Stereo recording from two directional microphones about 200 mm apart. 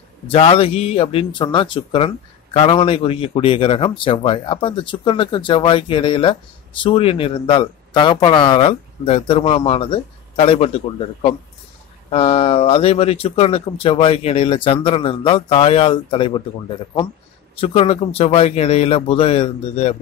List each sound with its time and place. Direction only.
0.3 s a man's voice: 30° left (ahead or behind)
12.1 s a man's voice: 30° left (ahead or behind)
17.6 s a man's voice: 30° left (ahead or behind)